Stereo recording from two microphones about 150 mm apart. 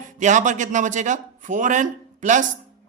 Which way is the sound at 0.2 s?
55° right (ahead or behind).